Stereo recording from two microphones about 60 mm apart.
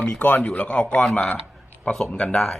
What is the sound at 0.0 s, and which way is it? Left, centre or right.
A man's voice, left.